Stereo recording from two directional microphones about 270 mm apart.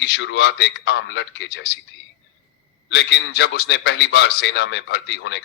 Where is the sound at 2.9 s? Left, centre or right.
Left.